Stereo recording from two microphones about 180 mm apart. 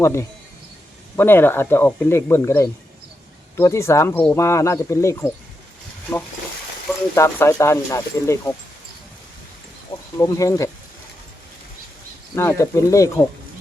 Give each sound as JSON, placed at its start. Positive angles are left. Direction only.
{"t": 0.0, "sound": "speech", "side_deg": 15}
{"t": 7.2, "sound": "speech", "side_deg": 15}
{"t": 9.9, "sound": "speech", "side_deg": 15}
{"t": 12.3, "sound": "speech", "side_deg": 15}